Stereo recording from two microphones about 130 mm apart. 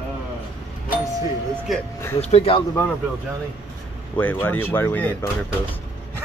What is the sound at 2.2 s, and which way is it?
Speech, 50° left (ahead or behind).